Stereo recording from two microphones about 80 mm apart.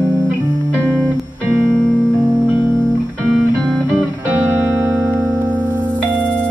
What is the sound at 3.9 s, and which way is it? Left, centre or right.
Music, centre.